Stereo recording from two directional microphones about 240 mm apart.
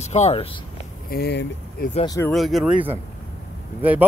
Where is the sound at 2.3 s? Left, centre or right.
Centre.